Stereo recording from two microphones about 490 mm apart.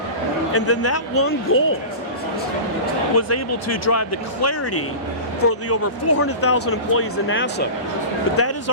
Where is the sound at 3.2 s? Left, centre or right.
Left.